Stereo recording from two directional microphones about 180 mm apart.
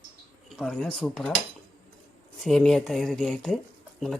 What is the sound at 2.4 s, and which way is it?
Speech, centre (ahead or behind).